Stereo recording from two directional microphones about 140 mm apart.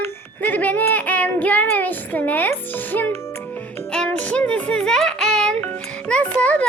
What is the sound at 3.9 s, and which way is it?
A child's voice, 10° left (ahead or behind).